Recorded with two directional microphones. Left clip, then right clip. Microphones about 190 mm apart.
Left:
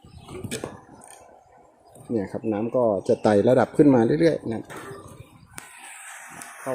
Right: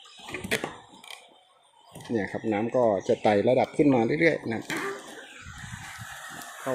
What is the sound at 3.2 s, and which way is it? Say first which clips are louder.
Speech: left 5 dB; 30° left (ahead or behind).